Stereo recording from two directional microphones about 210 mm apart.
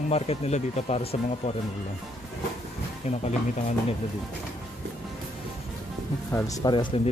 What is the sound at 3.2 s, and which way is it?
Speech, 30° left (ahead or behind).